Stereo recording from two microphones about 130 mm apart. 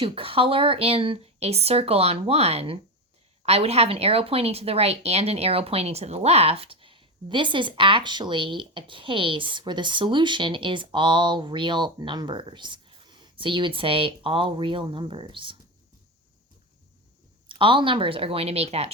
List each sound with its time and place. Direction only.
0.0 s speech: 45° right (ahead or behind)
17.5 s speech: 40° right (ahead or behind)